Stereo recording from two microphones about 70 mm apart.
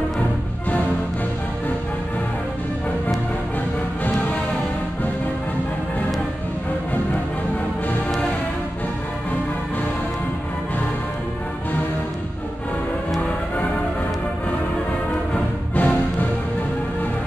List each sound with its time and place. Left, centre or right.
15.7 s music: left